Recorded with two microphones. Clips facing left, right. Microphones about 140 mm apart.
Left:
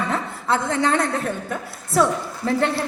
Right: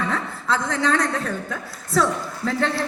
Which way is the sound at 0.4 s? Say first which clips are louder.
Left 2 dB; 65° left (ahead or behind).